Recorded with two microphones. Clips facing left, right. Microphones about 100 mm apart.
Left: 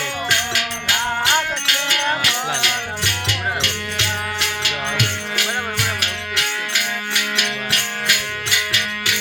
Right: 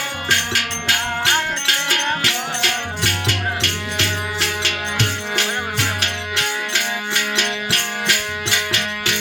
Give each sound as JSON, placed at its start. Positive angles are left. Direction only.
{"t": 0.3, "sound": "music", "side_deg": -40}